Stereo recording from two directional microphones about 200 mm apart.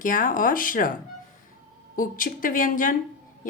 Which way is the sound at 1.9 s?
40° left (ahead or behind).